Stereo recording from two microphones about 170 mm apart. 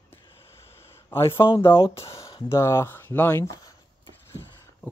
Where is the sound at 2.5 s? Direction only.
15° left (ahead or behind).